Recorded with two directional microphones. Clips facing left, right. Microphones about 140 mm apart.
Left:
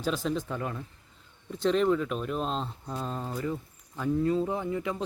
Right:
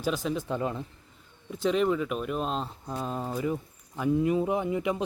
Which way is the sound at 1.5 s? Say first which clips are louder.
Left 1 dB; 5° right (ahead or behind).